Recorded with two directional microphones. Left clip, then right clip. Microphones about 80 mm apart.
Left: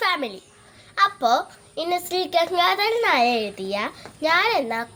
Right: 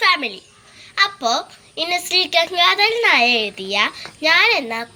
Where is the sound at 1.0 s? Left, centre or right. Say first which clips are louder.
Right 1 dB; left.